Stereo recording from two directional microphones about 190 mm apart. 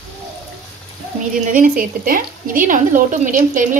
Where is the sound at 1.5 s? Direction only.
45° right (ahead or behind).